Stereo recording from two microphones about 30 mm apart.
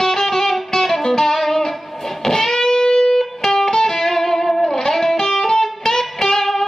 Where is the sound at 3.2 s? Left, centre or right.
Centre.